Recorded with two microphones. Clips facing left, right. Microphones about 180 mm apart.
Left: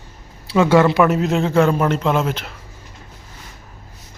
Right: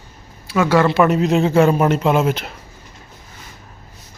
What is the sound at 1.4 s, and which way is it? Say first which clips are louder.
Speech: right 1 dB; 15° right (ahead or behind).